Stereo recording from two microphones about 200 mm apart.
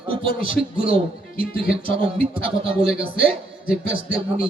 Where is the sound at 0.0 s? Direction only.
25° right (ahead or behind).